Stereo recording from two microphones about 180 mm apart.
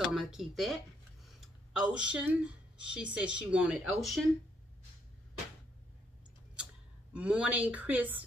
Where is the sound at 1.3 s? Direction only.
5° right (ahead or behind).